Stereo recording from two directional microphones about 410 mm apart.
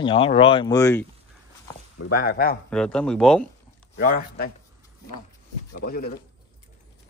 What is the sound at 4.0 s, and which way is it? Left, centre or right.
Speech, left.